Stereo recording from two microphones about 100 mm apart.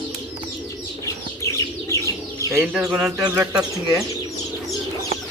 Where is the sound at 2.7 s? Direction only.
10° right (ahead or behind).